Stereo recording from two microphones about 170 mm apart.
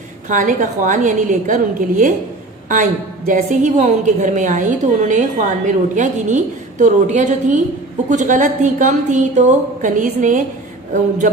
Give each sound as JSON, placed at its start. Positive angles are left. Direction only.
{"t": 0.3, "sound": "a woman's voice", "side_deg": -50}
{"t": 3.2, "sound": "a woman's voice", "side_deg": -50}